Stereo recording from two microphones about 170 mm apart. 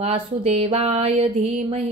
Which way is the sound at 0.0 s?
35° right (ahead or behind).